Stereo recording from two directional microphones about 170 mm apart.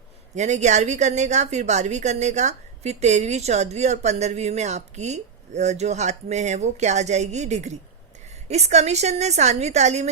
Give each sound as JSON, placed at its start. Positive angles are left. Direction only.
{"t": 0.3, "sound": "a woman's voice", "side_deg": -45}